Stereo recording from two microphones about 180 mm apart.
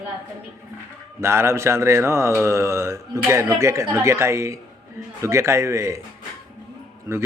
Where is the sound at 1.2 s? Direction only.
15° right (ahead or behind).